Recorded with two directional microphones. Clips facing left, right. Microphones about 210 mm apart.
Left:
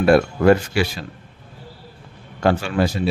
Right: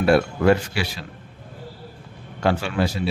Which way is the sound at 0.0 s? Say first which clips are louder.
Left 3 dB; 50° left (ahead or behind).